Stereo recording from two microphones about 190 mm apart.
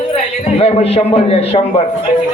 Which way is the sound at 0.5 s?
30° left (ahead or behind).